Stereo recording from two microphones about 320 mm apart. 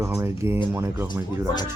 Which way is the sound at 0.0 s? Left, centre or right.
Centre.